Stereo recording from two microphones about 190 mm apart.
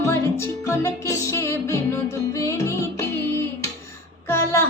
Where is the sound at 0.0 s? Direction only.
15° left (ahead or behind).